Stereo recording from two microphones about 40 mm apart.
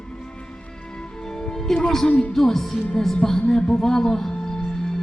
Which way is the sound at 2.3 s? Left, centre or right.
Centre.